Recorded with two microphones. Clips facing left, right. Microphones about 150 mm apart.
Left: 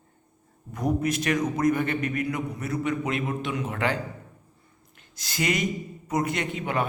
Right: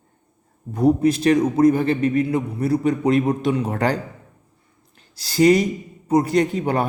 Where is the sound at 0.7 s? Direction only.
30° right (ahead or behind).